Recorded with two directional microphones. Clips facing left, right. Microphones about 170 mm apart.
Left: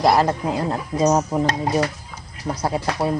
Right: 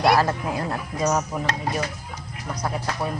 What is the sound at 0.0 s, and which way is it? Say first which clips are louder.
Speech: left 2 dB; 20° left (ahead or behind).